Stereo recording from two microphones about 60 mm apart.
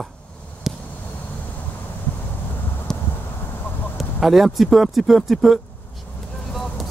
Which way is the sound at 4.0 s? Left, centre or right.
Centre.